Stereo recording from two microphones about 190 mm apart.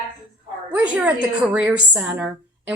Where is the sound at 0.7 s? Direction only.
5° right (ahead or behind).